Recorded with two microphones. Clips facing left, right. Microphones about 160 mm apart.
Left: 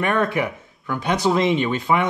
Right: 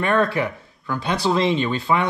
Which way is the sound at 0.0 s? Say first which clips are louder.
Right 1 dB; 15° left (ahead or behind).